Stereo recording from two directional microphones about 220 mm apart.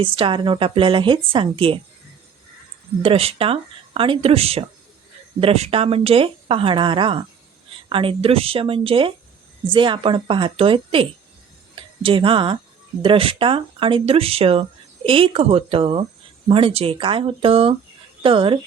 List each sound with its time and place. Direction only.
0.0 s speech: 25° right (ahead or behind)
3.0 s speech: 25° right (ahead or behind)